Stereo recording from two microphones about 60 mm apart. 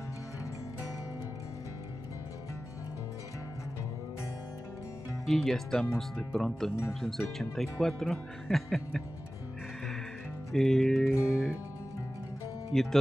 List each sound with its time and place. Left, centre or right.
5.2 s speech: centre
10.5 s music: centre
11.1 s music: left
12.7 s music: centre